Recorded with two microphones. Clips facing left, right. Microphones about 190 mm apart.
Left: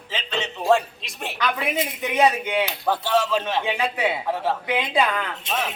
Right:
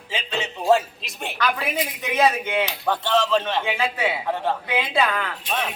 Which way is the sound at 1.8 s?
15° left (ahead or behind).